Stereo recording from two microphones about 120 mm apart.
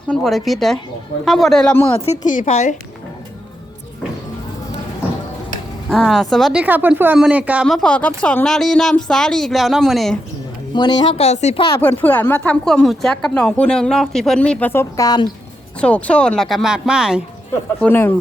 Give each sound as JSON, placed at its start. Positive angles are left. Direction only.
{"t": 0.1, "sound": "speech", "side_deg": 0}
{"t": 2.0, "sound": "a woman's voice", "side_deg": 75}
{"t": 5.9, "sound": "speech", "side_deg": 0}
{"t": 6.6, "sound": "a woman's voice", "side_deg": -15}
{"t": 7.7, "sound": "speech", "side_deg": 5}
{"t": 10.8, "sound": "a woman's voice", "side_deg": 40}
{"t": 11.1, "sound": "speech", "side_deg": 60}
{"t": 11.7, "sound": "a woman's voice", "side_deg": 15}
{"t": 15.8, "sound": "speech", "side_deg": 10}
{"t": 17.7, "sound": "a woman's voice", "side_deg": 15}